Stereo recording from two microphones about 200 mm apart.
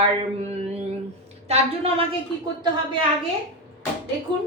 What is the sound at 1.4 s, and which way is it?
Speech, 30° right (ahead or behind).